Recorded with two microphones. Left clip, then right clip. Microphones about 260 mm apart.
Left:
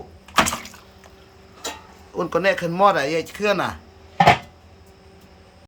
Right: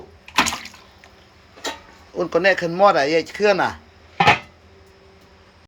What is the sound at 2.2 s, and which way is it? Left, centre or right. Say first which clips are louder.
Speech: right 3 dB; centre.